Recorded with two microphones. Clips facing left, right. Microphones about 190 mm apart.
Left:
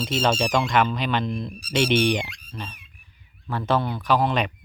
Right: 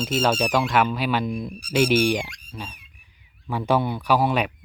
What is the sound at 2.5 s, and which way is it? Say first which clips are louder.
Squeak: even; 10° right (ahead or behind).